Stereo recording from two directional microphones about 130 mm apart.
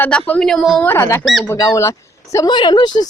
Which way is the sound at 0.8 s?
20° left (ahead or behind).